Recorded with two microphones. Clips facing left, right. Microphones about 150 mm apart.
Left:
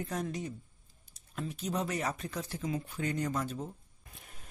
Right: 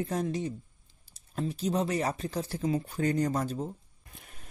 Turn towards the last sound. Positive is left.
turn(degrees=-30)  # may be behind; listen again after turning